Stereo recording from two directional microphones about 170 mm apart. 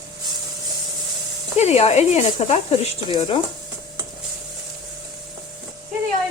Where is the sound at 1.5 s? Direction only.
40° left (ahead or behind).